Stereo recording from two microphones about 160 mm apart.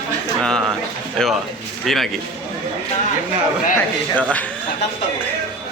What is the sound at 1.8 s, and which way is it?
Speech, centre (ahead or behind).